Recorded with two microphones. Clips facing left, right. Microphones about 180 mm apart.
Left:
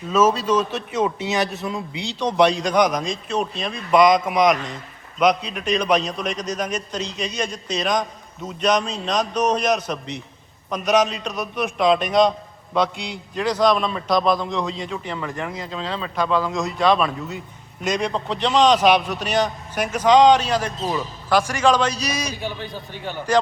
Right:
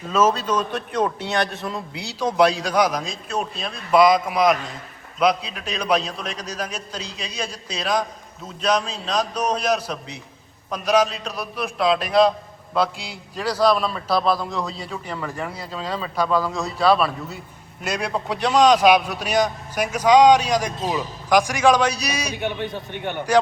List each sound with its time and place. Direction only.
0.1 s a man's voice: 10° left (ahead or behind); by 22.3 s 10° right (ahead or behind)
22.3 s a man's voice: 65° right (ahead or behind)
22.5 s a man's voice: centre (ahead or behind)
22.9 s a man's voice: 65° right (ahead or behind)